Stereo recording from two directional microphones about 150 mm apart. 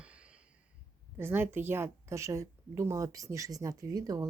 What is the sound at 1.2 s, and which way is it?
A woman's voice, 15° right (ahead or behind).